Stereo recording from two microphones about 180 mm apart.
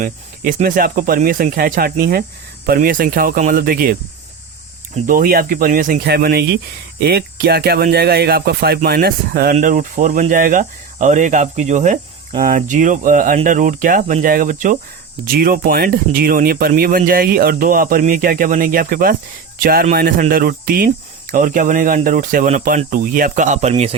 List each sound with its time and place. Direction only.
0.0 s speech: 50° right (ahead or behind)
4.9 s speech: 50° right (ahead or behind)
9.6 s speech: 45° right (ahead or behind)